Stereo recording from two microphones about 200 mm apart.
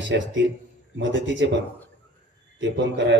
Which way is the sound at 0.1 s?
60° right (ahead or behind).